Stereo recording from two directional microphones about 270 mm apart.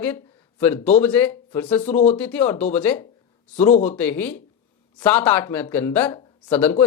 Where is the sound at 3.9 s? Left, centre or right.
Centre.